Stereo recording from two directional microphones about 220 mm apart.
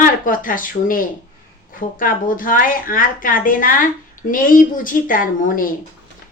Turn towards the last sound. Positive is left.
turn(degrees=40)  # may be behind; listen again after turning